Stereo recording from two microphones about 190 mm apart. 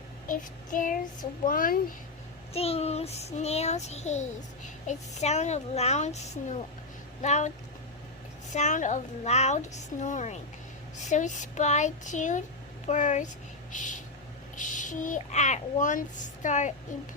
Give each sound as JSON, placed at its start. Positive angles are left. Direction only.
{"t": 0.3, "sound": "child singing", "side_deg": 45}
{"t": 2.5, "sound": "a child's voice", "side_deg": 30}
{"t": 8.5, "sound": "a child's voice", "side_deg": 40}